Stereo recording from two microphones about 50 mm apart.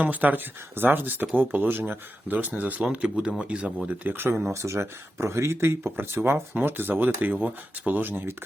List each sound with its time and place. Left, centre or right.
0.0 s a man's voice: right
4.5 s speech: right